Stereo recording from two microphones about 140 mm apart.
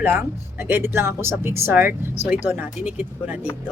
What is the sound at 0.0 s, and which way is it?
Speech, 10° right (ahead or behind).